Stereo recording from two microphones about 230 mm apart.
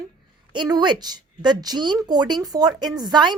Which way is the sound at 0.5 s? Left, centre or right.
Centre.